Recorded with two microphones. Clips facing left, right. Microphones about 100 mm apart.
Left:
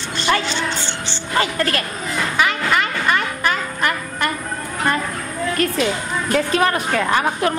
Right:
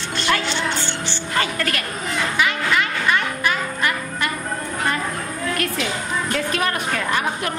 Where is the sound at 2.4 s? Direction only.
45° left (ahead or behind).